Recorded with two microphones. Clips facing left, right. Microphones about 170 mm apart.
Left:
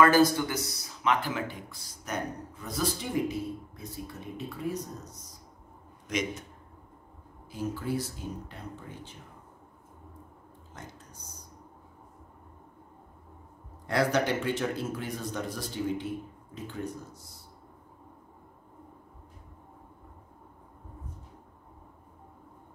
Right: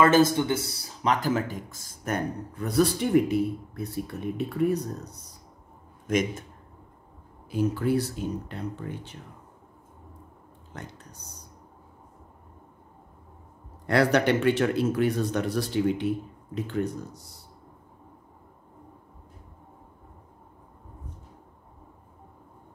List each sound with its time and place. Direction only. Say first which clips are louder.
0.0 s speech: right 2 dB; 20° right (ahead or behind); by 5.2 s 65° right (ahead or behind)
6.0 s speech: right 6 dB; 50° right (ahead or behind)
7.4 s a man's voice: right 8 dB; 65° right (ahead or behind)
10.7 s speech: right 5 dB; 65° right (ahead or behind)
13.8 s a man's voice: right 5 dB; 65° right (ahead or behind)